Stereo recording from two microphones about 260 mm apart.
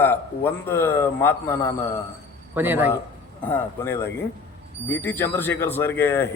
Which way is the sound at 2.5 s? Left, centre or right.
Centre.